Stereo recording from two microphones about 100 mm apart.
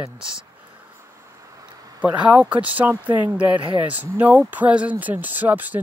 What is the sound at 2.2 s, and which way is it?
Speech, 15° right (ahead or behind).